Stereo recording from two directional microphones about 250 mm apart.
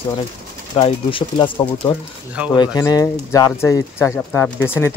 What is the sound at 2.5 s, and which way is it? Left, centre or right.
Speech, centre.